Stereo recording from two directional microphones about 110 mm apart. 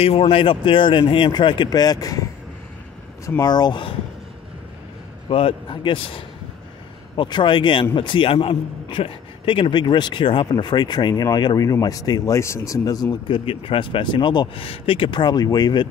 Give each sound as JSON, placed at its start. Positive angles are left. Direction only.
{"t": 0.0, "sound": "a man's voice", "side_deg": 60}
{"t": 1.7, "sound": "speech", "side_deg": 35}
{"t": 3.3, "sound": "speech", "side_deg": 35}
{"t": 5.3, "sound": "a man's voice", "side_deg": 55}
{"t": 13.3, "sound": "a man's voice", "side_deg": 55}